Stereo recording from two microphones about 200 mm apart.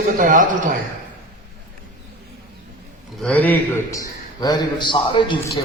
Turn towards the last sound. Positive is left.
turn(degrees=25)  # may be behind; listen again after turning